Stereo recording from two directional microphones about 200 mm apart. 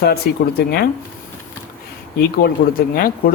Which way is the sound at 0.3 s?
55° left (ahead or behind).